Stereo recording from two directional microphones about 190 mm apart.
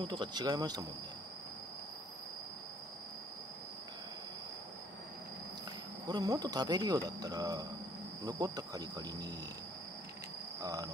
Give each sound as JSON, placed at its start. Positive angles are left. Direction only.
{"t": 0.0, "sound": "speech", "side_deg": -25}
{"t": 6.0, "sound": "speech", "side_deg": -20}
{"t": 10.6, "sound": "cricket", "side_deg": -20}